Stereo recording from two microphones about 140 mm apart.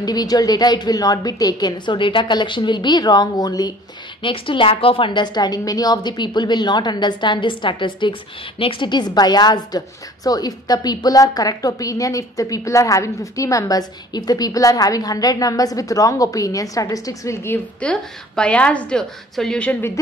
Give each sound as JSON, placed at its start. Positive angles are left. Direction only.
{"t": 0.0, "sound": "a woman's voice", "side_deg": 30}